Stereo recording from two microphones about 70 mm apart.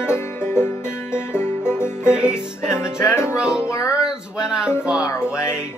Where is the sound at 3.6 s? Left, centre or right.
Left.